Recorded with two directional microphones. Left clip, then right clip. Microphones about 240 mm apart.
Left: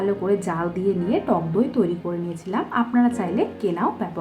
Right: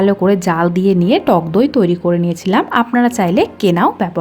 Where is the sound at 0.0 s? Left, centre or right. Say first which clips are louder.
Right 9 dB; right.